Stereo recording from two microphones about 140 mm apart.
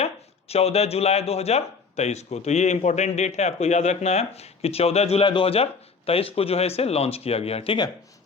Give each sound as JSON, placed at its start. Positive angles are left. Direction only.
{"t": 0.0, "sound": "speech", "side_deg": 45}